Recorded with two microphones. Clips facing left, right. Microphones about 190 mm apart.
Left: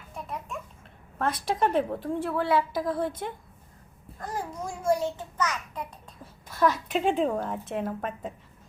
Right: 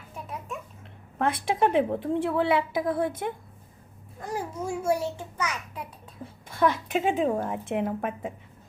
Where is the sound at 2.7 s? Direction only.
55° right (ahead or behind).